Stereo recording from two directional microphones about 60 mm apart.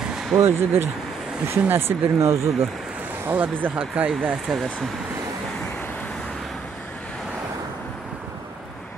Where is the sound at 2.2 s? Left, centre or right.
Right.